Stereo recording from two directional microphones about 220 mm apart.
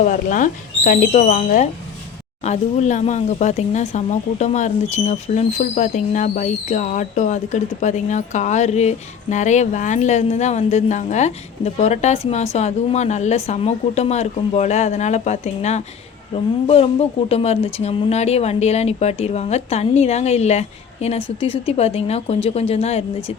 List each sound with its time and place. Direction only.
0.0 s speech: 35° left (ahead or behind)